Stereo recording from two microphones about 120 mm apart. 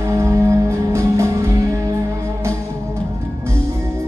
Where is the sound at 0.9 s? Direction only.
25° right (ahead or behind).